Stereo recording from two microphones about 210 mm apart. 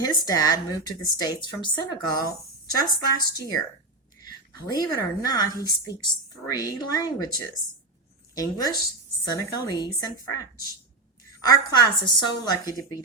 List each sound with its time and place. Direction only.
0.0 s a woman's voice: 20° left (ahead or behind)
11.3 s a woman's voice: 20° left (ahead or behind)